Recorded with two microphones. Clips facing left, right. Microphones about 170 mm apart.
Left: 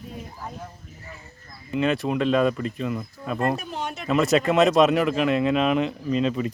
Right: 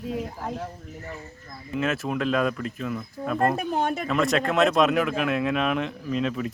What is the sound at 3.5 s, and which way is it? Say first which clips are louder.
Speech: right 6 dB; 55° right (ahead or behind).